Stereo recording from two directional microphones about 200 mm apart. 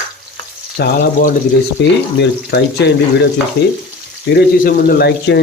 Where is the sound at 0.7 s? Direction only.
45° left (ahead or behind).